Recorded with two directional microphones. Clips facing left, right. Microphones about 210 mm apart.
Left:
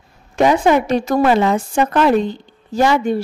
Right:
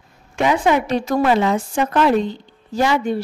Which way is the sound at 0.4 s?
40° left (ahead or behind).